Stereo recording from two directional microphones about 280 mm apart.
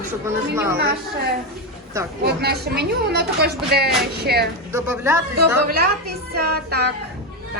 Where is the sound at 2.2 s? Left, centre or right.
Right.